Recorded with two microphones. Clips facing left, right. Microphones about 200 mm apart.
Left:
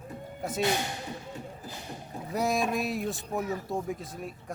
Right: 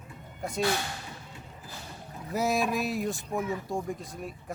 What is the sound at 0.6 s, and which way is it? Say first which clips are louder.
Speech: left 1 dB; 20° left (ahead or behind).